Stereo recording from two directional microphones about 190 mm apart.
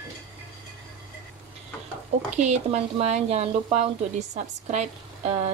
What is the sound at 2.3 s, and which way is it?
Speech, 35° right (ahead or behind).